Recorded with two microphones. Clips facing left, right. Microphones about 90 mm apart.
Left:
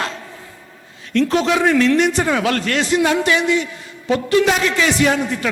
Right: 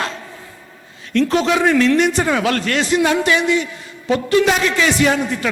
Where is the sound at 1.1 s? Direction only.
25° right (ahead or behind).